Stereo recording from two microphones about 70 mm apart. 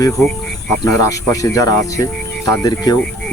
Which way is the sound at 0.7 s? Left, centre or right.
Left.